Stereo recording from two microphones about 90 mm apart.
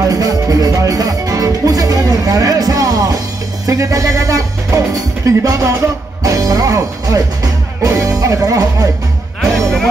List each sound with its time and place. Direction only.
0.0 s music: 40° right (ahead or behind)